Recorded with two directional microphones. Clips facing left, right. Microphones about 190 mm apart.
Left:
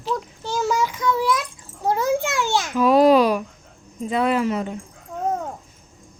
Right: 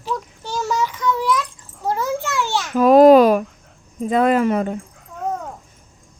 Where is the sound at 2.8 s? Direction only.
50° right (ahead or behind).